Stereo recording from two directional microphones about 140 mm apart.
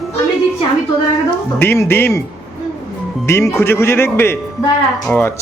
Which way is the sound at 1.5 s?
15° left (ahead or behind).